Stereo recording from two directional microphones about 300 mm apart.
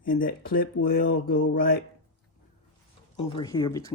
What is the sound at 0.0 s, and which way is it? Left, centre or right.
Speech, left.